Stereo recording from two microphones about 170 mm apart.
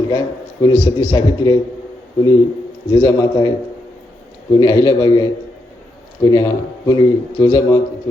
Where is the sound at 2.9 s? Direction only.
25° left (ahead or behind).